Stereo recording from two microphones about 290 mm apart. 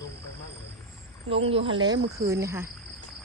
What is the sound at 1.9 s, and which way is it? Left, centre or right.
Speech, right.